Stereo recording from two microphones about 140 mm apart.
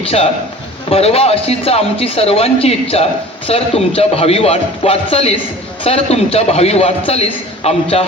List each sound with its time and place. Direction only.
0.0 s a man's voice: 45° left (ahead or behind)